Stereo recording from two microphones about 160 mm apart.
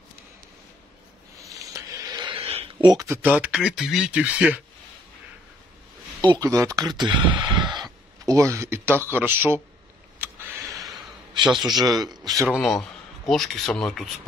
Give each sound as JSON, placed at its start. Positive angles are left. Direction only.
{"t": 1.4, "sound": "a sound", "side_deg": -20}
{"t": 3.1, "sound": "speech", "side_deg": -10}
{"t": 6.2, "sound": "speech", "side_deg": -25}
{"t": 7.8, "sound": "a sound", "side_deg": -20}
{"t": 9.1, "sound": "speech", "side_deg": -15}
{"t": 10.1, "sound": "vehicle", "side_deg": -15}
{"t": 11.4, "sound": "speech", "side_deg": 0}
{"t": 11.8, "sound": "speech", "side_deg": -25}
{"t": 12.4, "sound": "speech", "side_deg": 0}